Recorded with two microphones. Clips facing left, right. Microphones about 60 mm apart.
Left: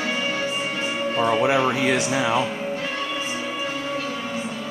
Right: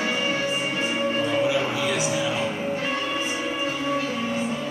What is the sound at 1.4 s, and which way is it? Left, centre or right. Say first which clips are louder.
Speech: left 4 dB; left.